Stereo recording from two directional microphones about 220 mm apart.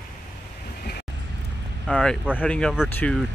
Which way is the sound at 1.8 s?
5° left (ahead or behind).